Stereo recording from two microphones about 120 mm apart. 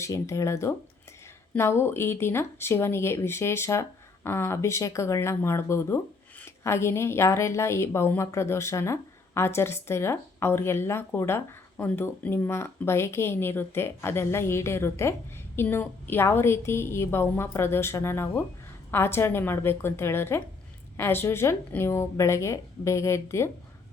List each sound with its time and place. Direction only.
0.0 s a woman's voice: 25° left (ahead or behind)